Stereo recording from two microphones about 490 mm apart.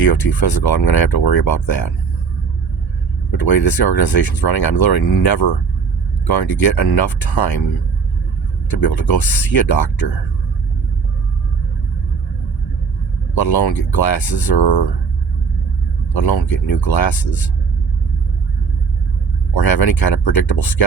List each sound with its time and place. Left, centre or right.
0.0 s speech: left
3.3 s speech: left
8.7 s speech: left
13.3 s speech: left
16.1 s speech: left
19.5 s speech: left